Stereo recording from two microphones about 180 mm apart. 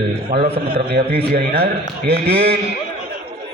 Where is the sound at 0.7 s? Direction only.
55° right (ahead or behind).